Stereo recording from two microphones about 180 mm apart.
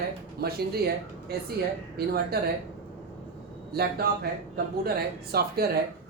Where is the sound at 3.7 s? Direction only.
60° right (ahead or behind).